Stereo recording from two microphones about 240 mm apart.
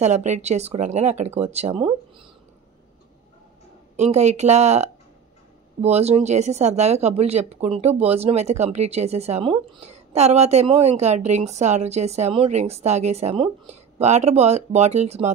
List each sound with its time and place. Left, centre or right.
0.0 s speech: right
3.9 s speech: right